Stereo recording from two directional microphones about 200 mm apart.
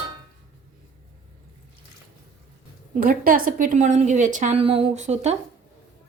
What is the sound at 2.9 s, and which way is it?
A woman's voice, 45° right (ahead or behind).